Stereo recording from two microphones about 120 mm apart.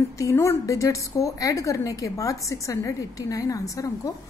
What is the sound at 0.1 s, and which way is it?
A woman's voice, 25° left (ahead or behind).